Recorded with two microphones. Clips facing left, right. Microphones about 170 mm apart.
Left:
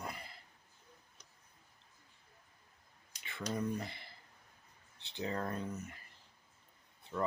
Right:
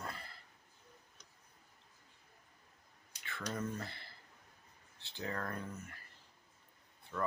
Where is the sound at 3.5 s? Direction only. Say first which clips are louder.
Left 3 dB; 15° left (ahead or behind).